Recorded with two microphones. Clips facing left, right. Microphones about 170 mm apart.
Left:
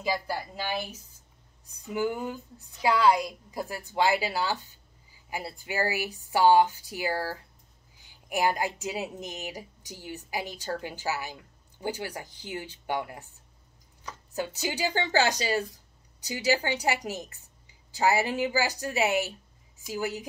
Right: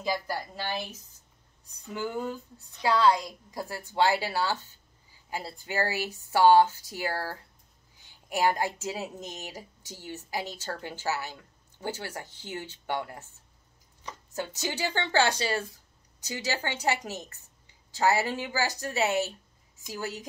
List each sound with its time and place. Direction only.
0.0 s a woman's voice: 10° left (ahead or behind)
1.9 s a woman's voice: 15° left (ahead or behind)
8.3 s a woman's voice: 15° left (ahead or behind)
14.6 s a woman's voice: 15° left (ahead or behind)